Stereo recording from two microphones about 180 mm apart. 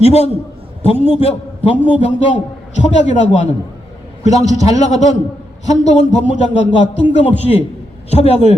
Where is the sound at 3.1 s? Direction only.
40° left (ahead or behind).